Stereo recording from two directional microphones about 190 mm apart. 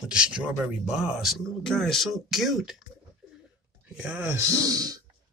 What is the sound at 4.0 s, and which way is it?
Speech, 10° right (ahead or behind).